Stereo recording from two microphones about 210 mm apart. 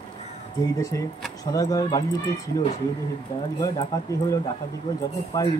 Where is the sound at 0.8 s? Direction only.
15° left (ahead or behind).